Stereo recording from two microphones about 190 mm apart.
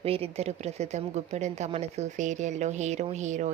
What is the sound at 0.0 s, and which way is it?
Speech, 30° right (ahead or behind).